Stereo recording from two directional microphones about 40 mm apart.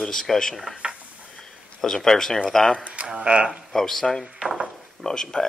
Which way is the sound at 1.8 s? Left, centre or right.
Centre.